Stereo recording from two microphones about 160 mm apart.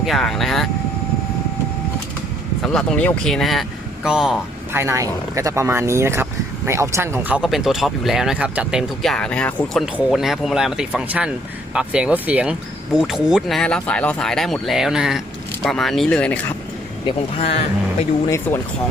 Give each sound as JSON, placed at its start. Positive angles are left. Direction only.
{"t": 0.0, "sound": "speech", "side_deg": 0}
{"t": 2.6, "sound": "speech", "side_deg": 5}
{"t": 4.7, "sound": "speech", "side_deg": -15}
{"t": 7.4, "sound": "speech", "side_deg": 0}
{"t": 17.1, "sound": "speech", "side_deg": 40}
{"t": 18.3, "sound": "speech", "side_deg": 15}